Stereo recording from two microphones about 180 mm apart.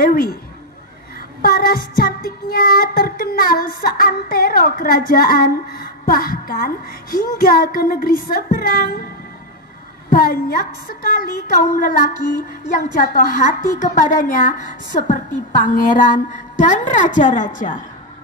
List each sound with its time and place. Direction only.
0.0 s child singing: 55° left (ahead or behind)
1.4 s child singing: 55° left (ahead or behind)
10.1 s child singing: 50° left (ahead or behind)